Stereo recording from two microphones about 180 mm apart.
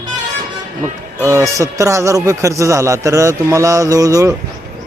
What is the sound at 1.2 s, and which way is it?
Speech, 15° right (ahead or behind).